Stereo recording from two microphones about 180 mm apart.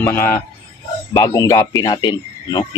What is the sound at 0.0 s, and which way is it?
Speech, 10° left (ahead or behind).